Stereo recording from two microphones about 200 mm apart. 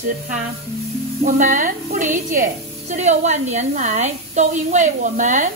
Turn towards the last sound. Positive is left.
turn(degrees=-40)  # may be behind; listen again after turning